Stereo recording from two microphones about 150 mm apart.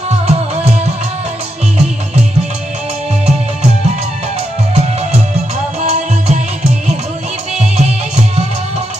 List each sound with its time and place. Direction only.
0.3 s music: 45° right (ahead or behind)
5.8 s music: 45° right (ahead or behind)